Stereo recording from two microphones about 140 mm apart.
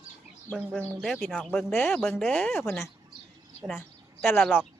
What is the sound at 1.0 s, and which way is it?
Speech, centre (ahead or behind).